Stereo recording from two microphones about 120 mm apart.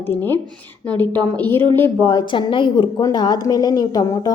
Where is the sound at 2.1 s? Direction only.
40° left (ahead or behind).